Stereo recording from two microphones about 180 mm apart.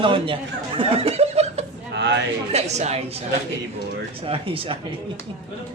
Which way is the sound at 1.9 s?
75° right (ahead or behind).